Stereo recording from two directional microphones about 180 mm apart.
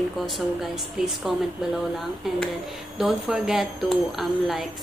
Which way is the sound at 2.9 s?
5° right (ahead or behind).